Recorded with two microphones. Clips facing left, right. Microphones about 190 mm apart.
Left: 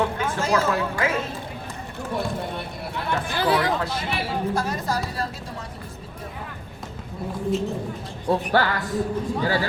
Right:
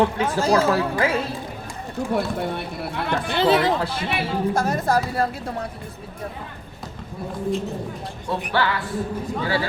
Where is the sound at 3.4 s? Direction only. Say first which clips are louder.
Right 4 dB; 25° right (ahead or behind).